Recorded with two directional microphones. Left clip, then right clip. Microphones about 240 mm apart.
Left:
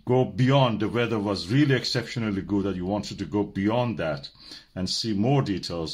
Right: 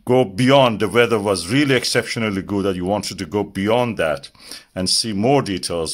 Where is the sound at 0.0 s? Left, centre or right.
Right.